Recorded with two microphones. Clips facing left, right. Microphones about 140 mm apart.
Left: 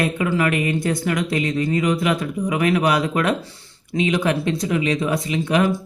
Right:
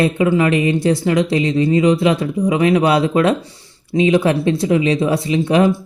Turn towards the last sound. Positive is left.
turn(degrees=-30)  # may be behind; listen again after turning